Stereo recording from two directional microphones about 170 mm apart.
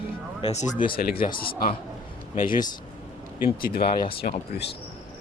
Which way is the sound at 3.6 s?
65° left (ahead or behind).